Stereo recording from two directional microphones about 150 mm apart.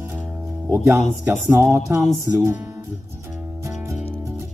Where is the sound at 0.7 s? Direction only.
20° right (ahead or behind).